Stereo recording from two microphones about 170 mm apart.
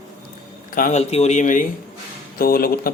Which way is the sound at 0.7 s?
50° left (ahead or behind).